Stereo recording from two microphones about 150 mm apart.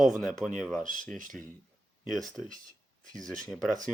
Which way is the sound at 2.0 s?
Centre (ahead or behind).